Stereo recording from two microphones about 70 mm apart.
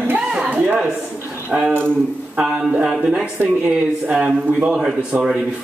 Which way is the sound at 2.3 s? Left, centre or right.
Centre.